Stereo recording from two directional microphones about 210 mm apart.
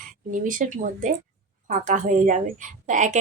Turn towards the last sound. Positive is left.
turn(degrees=-35)  # may be behind; listen again after turning